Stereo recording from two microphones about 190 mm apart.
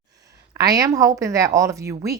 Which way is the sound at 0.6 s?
20° right (ahead or behind).